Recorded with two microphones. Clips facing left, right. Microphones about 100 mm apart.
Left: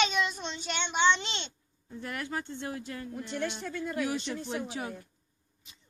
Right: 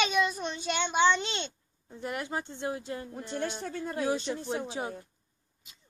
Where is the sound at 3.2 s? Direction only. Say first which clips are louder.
Even; 35° right (ahead or behind).